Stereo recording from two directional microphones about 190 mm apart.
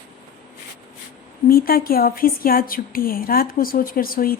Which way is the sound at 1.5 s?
50° left (ahead or behind).